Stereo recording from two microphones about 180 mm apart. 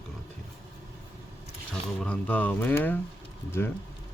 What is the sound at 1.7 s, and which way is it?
Speech, 10° left (ahead or behind).